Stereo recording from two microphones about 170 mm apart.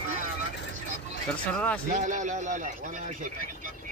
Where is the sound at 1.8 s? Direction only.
50° right (ahead or behind).